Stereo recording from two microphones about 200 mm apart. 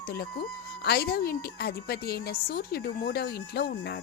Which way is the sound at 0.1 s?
50° left (ahead or behind).